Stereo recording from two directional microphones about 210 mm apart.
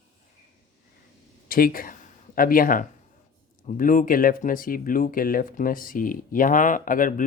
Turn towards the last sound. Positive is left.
turn(degrees=40)  # may be behind; listen again after turning